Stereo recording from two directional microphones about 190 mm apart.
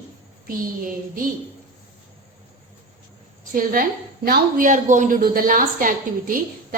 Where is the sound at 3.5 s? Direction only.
50° right (ahead or behind).